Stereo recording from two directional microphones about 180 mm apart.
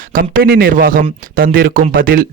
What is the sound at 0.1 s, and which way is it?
Speech, 55° right (ahead or behind).